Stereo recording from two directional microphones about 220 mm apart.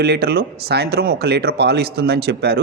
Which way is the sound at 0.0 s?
45° right (ahead or behind).